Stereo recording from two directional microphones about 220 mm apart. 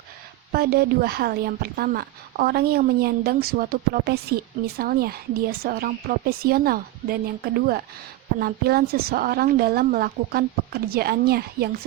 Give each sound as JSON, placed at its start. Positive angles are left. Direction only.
{"t": 0.5, "sound": "a woman's voice", "side_deg": -45}